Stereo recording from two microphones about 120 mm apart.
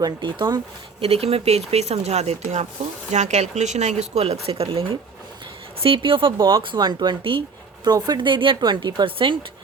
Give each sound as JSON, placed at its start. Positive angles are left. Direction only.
{"t": 0.0, "sound": "a woman's voice", "side_deg": -40}
{"t": 1.0, "sound": "a woman's voice", "side_deg": -55}